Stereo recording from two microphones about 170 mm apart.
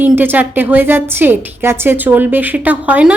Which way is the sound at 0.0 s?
10° right (ahead or behind).